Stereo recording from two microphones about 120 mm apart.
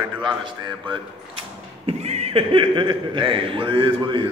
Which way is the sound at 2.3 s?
45° right (ahead or behind).